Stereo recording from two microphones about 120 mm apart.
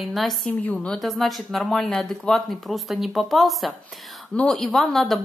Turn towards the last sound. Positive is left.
turn(degrees=0)  # may be behind; listen again after turning